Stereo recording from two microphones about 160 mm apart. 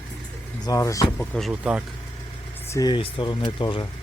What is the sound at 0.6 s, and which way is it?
Speech, 20° left (ahead or behind).